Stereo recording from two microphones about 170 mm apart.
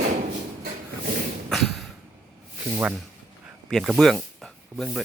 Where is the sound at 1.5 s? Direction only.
Centre (ahead or behind).